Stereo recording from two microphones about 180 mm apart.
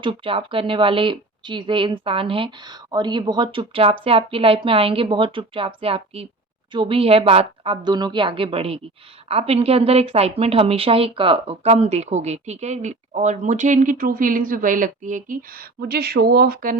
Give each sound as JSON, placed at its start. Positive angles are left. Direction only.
{"t": 0.0, "sound": "a woman's voice", "side_deg": -30}